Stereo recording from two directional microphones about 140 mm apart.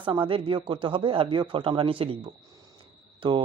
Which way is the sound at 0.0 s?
40° right (ahead or behind).